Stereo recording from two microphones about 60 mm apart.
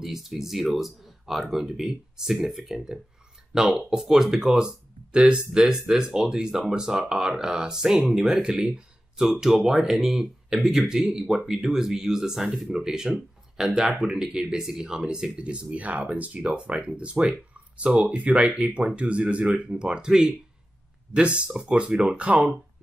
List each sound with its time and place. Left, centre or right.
0.0 s speech: centre; by 22.5 s right